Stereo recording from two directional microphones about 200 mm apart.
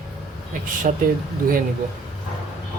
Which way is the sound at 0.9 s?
40° right (ahead or behind).